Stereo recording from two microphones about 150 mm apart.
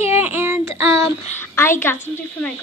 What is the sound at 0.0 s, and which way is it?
Child singing, 15° right (ahead or behind).